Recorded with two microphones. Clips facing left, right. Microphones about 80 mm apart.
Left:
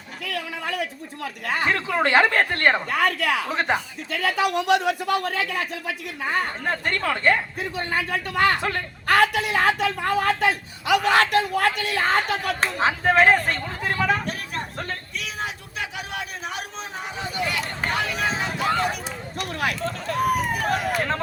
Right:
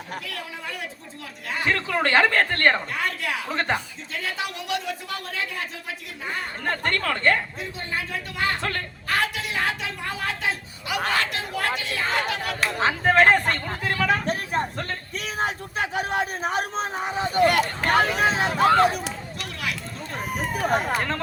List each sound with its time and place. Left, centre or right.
0.2 s a man's voice: left
1.6 s speech: centre
2.9 s a man's voice: left
3.5 s speech: centre
4.1 s a man's voice: left
6.2 s a man's voice: left
6.7 s speech: centre
7.6 s a man's voice: left
10.8 s a man's voice: left
12.8 s speech: centre
13.8 s speech: left
15.1 s a man's voice: right
19.4 s a man's voice: left
19.8 s speech: left